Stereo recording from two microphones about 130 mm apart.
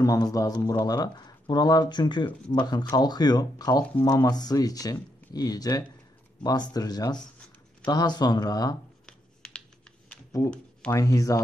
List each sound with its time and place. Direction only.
0.0 s speech: 25° left (ahead or behind)
10.9 s speech: 25° left (ahead or behind)